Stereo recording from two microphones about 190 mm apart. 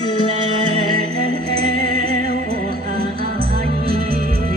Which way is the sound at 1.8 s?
50° right (ahead or behind).